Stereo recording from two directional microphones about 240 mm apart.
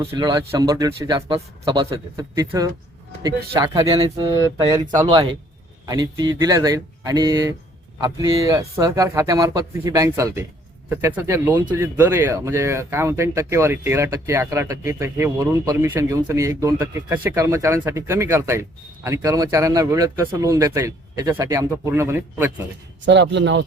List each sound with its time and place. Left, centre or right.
0.0 s speech: centre
23.0 s speech: right